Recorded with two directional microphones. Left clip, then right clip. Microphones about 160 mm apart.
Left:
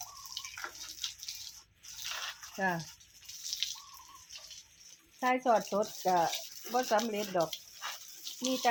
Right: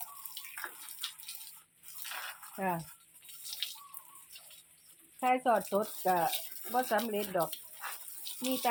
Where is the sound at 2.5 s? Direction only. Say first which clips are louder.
Left 2 dB; 15° left (ahead or behind).